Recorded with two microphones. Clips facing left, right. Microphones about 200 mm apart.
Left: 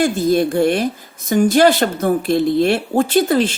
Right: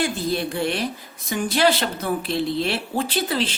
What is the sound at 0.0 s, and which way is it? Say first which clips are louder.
Speech: left 9 dB; 45° left (ahead or behind).